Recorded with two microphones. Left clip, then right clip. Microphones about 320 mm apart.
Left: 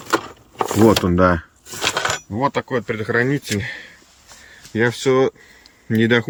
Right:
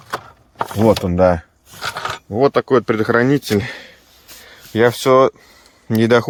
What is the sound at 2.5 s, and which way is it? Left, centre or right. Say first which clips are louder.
Speech: right 7 dB; centre.